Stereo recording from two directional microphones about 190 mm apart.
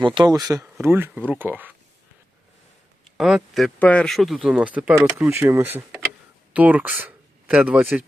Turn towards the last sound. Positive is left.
turn(degrees=-5)  # may be behind; listen again after turning